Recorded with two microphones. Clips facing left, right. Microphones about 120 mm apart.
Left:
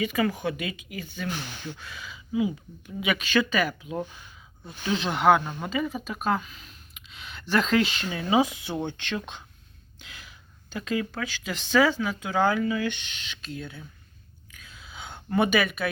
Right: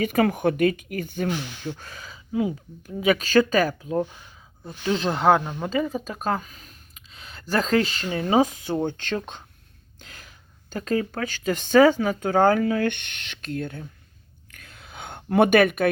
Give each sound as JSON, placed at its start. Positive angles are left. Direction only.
{"t": 0.0, "sound": "speech", "side_deg": -55}
{"t": 5.5, "sound": "speech", "side_deg": -20}
{"t": 5.7, "sound": "speech", "side_deg": -40}
{"t": 14.5, "sound": "a sound", "side_deg": -55}